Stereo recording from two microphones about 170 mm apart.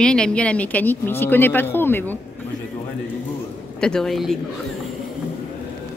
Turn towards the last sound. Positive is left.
turn(degrees=0)  # may be behind; listen again after turning